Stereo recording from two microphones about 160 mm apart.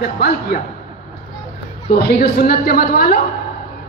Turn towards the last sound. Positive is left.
turn(degrees=70)  # may be behind; listen again after turning